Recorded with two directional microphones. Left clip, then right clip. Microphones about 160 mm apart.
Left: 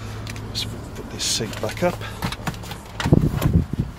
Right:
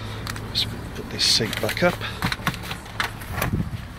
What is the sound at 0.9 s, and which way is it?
Speech, 20° right (ahead or behind).